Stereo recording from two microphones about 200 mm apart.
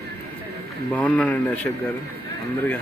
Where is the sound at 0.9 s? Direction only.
10° left (ahead or behind).